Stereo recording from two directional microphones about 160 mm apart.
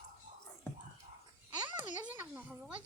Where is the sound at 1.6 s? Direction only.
30° right (ahead or behind).